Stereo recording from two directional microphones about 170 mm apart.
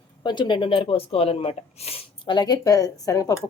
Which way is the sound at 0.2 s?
25° left (ahead or behind).